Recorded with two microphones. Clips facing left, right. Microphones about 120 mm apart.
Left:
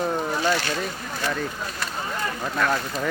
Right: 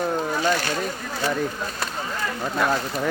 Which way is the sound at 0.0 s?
Centre (ahead or behind).